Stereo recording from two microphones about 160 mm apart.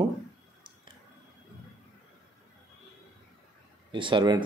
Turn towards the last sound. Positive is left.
turn(degrees=-30)  # may be behind; listen again after turning